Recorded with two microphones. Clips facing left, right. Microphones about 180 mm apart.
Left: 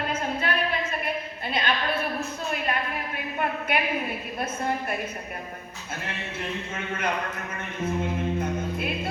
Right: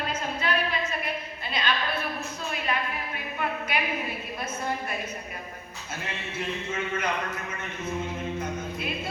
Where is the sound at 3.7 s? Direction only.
55° left (ahead or behind).